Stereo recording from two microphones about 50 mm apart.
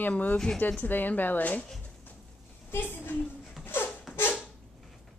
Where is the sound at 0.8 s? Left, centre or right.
Left.